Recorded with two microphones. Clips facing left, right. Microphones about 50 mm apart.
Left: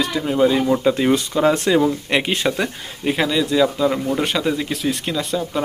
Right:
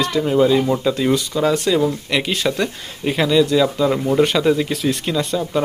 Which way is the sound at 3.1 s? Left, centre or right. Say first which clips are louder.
Right 3 dB; centre.